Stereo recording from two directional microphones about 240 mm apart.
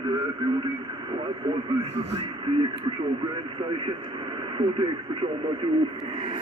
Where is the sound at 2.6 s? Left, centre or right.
Centre.